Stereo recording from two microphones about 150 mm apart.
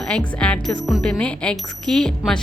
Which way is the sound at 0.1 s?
5° left (ahead or behind).